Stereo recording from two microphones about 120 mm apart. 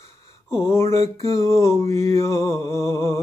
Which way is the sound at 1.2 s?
25° left (ahead or behind).